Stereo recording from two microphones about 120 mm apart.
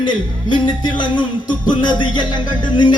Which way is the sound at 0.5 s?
40° left (ahead or behind).